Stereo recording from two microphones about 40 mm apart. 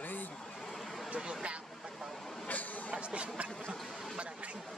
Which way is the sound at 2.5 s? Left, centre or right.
Left.